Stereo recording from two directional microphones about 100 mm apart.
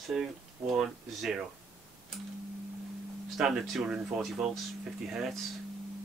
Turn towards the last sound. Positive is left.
turn(degrees=-5)  # may be behind; listen again after turning